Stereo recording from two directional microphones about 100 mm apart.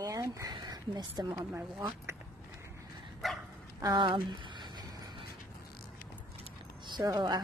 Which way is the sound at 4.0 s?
50° right (ahead or behind).